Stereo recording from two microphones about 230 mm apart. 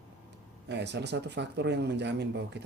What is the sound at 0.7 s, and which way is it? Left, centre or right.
Speech, right.